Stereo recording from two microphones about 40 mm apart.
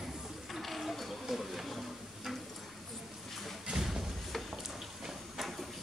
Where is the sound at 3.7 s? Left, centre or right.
Right.